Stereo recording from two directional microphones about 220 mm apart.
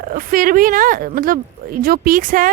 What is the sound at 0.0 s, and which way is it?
Speech, 40° right (ahead or behind).